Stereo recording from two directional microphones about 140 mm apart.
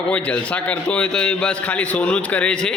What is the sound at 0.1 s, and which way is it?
A man's voice, 10° left (ahead or behind).